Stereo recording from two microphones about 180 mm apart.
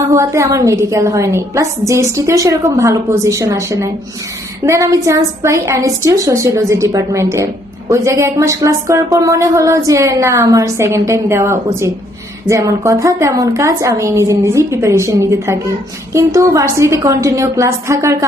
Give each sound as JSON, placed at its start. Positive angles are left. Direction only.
{"t": 0.1, "sound": "a woman's voice", "side_deg": -15}